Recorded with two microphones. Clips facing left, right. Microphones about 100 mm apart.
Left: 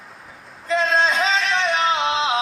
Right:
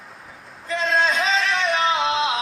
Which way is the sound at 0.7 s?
25° left (ahead or behind).